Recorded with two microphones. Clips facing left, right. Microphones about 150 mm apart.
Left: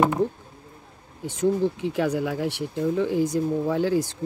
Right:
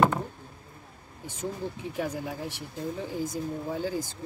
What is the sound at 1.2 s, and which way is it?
Speech, 85° left.